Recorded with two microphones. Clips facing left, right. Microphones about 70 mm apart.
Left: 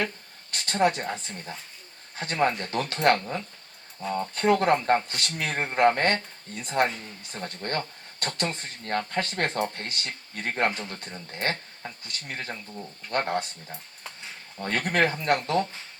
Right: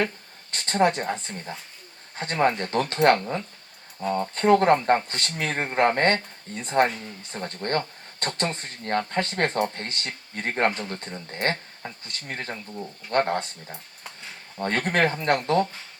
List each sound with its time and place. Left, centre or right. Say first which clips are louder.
0.5 s speech: right 2 dB; right
2.1 s speech: right 2 dB; right
4.1 s speech: right 4 dB; right
14.6 s speech: right 2 dB; right